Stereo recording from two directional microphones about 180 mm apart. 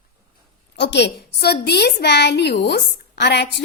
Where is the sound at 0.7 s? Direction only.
70° left (ahead or behind).